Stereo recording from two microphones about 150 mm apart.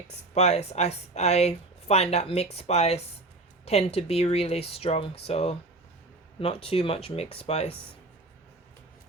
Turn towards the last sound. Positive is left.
turn(degrees=40)  # may be behind; listen again after turning